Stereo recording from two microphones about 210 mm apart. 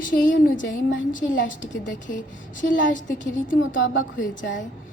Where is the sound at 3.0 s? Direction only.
40° left (ahead or behind).